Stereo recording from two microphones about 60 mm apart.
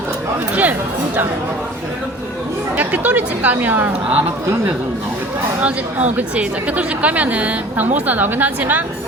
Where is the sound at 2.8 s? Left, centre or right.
Right.